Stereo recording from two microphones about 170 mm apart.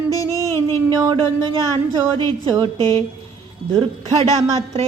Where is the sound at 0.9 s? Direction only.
25° right (ahead or behind).